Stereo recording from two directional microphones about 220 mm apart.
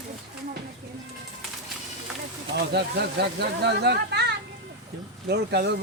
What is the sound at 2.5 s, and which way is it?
Speech, 50° right (ahead or behind).